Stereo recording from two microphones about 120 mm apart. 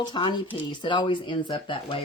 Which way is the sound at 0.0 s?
40° left (ahead or behind).